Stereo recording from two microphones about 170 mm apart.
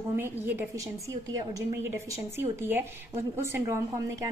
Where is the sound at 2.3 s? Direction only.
15° right (ahead or behind).